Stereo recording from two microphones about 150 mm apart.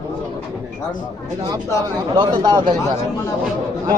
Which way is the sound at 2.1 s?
30° right (ahead or behind).